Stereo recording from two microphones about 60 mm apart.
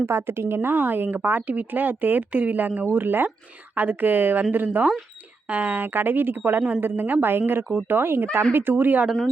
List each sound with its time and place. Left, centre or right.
0.0 s a woman's voice: right